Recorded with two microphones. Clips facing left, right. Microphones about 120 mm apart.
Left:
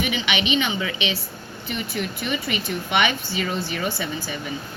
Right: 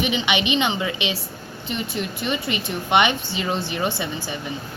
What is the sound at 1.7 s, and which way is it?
Speech, 25° right (ahead or behind).